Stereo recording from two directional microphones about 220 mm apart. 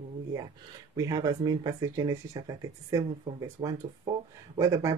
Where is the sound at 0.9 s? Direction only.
15° right (ahead or behind).